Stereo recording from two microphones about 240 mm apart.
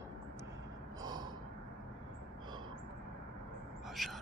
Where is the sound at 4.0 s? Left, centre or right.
Centre.